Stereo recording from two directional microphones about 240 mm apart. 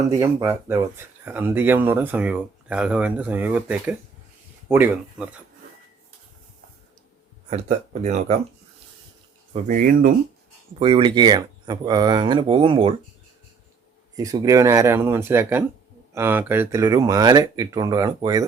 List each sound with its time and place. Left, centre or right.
0.2 s speech: centre
7.5 s speech: right
9.5 s speech: right
10.8 s speech: right
14.2 s speech: centre